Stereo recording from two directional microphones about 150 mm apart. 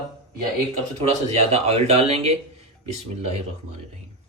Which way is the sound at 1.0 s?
45° right (ahead or behind).